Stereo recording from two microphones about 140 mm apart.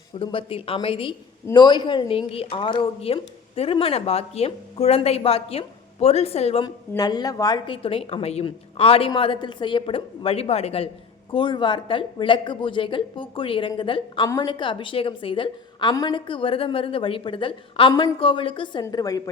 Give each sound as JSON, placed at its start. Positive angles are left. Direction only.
{"t": 0.2, "sound": "a woman's voice", "side_deg": 40}
{"t": 6.9, "sound": "a woman's voice", "side_deg": 30}
{"t": 7.8, "sound": "a woman's voice", "side_deg": 40}